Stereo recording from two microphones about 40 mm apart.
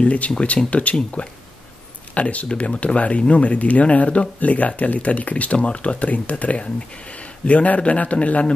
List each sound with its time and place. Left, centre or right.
0.0 s speech: left